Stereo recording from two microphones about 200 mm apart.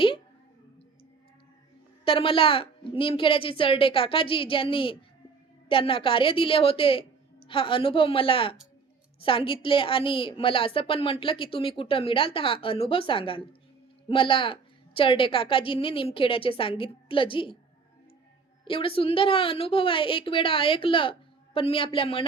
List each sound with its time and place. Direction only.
2.0 s a woman's voice: 25° left (ahead or behind)
18.6 s a woman's voice: 25° left (ahead or behind)